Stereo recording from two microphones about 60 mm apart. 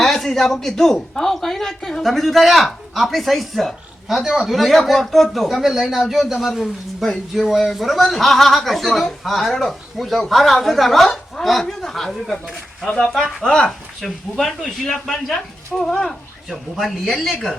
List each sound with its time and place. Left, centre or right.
0.0 s a man's voice: centre
13.4 s speech: centre
13.7 s a man's voice: centre